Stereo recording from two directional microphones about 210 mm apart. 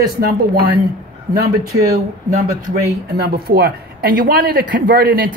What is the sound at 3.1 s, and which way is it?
A man's voice, 50° right (ahead or behind).